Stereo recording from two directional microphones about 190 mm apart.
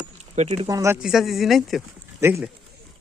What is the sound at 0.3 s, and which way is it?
Speech, 35° right (ahead or behind).